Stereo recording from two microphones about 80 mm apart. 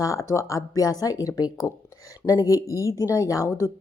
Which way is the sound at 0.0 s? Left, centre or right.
Left.